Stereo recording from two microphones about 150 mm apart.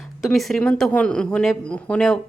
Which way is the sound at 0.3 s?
Centre (ahead or behind).